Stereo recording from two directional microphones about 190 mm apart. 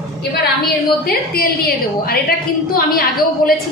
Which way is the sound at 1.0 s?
55° left (ahead or behind).